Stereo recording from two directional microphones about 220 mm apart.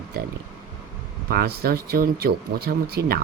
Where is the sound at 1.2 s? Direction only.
45° right (ahead or behind).